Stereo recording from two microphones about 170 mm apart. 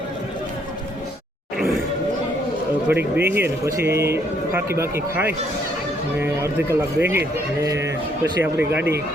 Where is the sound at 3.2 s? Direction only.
15° right (ahead or behind).